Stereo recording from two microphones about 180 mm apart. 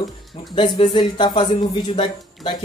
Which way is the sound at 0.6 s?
25° left (ahead or behind).